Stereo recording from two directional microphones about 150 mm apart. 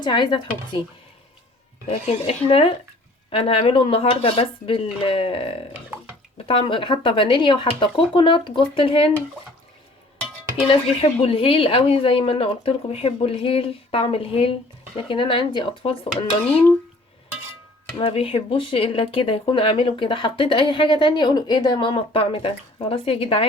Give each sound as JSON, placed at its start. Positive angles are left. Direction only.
{"t": 0.0, "sound": "speech", "side_deg": 30}
{"t": 1.9, "sound": "speech", "side_deg": 40}
{"t": 10.7, "sound": "speech", "side_deg": 35}
{"t": 17.9, "sound": "speech", "side_deg": 35}